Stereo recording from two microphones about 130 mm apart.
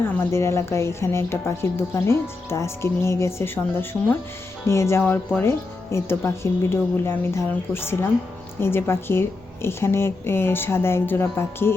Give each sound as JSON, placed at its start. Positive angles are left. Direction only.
{"t": 0.0, "sound": "a woman's voice", "side_deg": 20}